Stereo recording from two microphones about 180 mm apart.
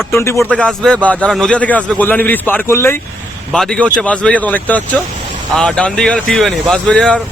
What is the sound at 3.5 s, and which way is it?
Speech, 5° left (ahead or behind).